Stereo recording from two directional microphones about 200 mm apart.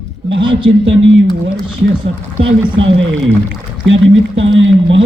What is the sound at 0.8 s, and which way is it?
Speech, 70° right (ahead or behind).